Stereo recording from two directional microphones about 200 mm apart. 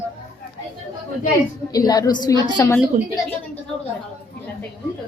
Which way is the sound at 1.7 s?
20° left (ahead or behind).